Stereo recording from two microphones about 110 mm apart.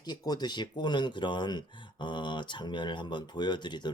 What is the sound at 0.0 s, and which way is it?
Speech, 40° left (ahead or behind).